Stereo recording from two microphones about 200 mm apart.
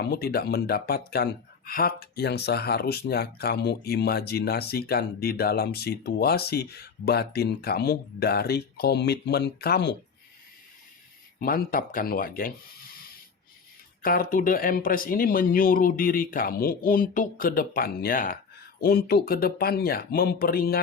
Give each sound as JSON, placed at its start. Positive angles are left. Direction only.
{"t": 0.0, "sound": "speech", "side_deg": 50}
{"t": 11.3, "sound": "speech", "side_deg": 50}
{"t": 14.0, "sound": "speech", "side_deg": 45}